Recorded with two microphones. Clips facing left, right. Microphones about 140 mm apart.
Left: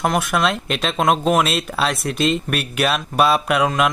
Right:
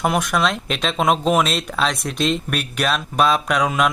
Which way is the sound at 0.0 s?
Centre (ahead or behind).